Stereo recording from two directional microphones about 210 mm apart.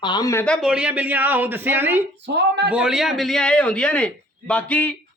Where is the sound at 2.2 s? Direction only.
55° right (ahead or behind).